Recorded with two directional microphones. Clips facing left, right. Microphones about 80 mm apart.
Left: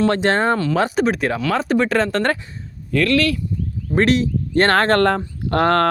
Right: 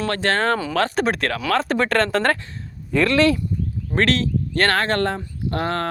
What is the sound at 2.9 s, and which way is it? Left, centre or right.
Speech, right.